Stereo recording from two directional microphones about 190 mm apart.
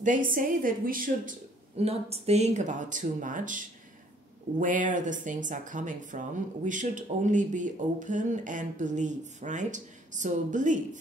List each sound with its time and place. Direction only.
0.0 s a woman's voice: 45° right (ahead or behind)
1.8 s speech: 30° right (ahead or behind)